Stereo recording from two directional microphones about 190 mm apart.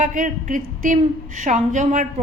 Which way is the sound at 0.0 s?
45° right (ahead or behind).